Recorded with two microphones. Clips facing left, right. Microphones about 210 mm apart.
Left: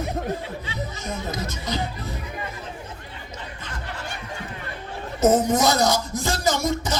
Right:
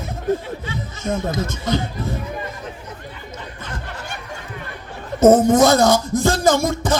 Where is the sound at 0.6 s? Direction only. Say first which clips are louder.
Right 6 dB; 50° right (ahead or behind).